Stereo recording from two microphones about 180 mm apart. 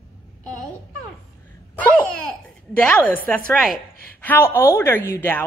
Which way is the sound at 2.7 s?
5° left (ahead or behind).